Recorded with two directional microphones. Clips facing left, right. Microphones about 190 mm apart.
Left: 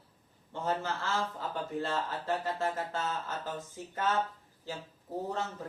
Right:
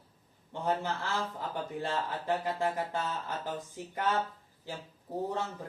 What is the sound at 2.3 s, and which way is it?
Speech, 15° right (ahead or behind).